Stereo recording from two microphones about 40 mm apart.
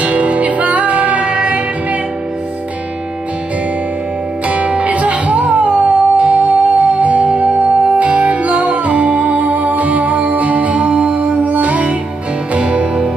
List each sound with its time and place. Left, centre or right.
0.0 s music: right
4.5 s music: right